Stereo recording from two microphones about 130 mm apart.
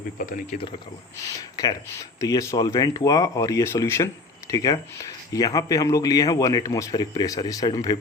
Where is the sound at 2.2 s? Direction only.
25° left (ahead or behind).